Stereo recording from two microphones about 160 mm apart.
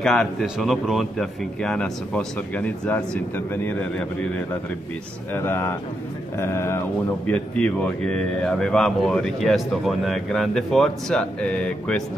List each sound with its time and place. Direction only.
0.0 s speech: centre (ahead or behind)
5.3 s speech: 15° left (ahead or behind)
7.2 s speech: 5° left (ahead or behind)